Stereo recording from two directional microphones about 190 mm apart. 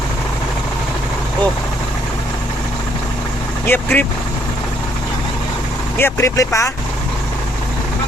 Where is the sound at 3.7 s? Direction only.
10° left (ahead or behind).